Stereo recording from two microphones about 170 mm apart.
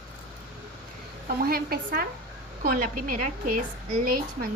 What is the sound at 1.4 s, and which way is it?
A woman's voice, 60° right (ahead or behind).